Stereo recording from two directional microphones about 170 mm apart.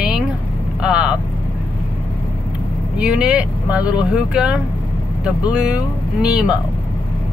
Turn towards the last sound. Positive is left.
turn(degrees=-5)  # may be behind; listen again after turning